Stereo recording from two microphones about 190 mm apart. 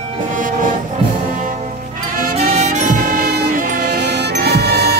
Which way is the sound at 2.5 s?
35° right (ahead or behind).